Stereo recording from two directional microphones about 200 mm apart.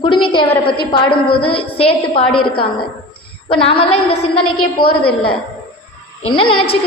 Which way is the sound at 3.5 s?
30° left (ahead or behind).